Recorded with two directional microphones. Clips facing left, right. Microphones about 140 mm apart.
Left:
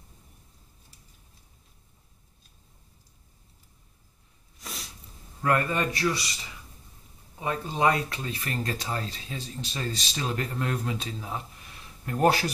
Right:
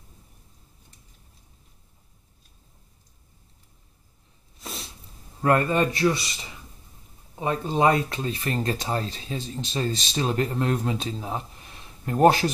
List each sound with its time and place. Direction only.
4.6 s sneeze: 25° right (ahead or behind)
5.4 s speech: 25° right (ahead or behind)
7.3 s speech: 25° right (ahead or behind)